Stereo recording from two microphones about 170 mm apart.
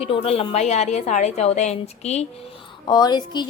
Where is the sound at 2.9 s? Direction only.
25° left (ahead or behind).